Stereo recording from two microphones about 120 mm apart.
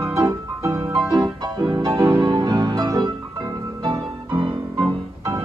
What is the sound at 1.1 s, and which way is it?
Music, 40° right (ahead or behind).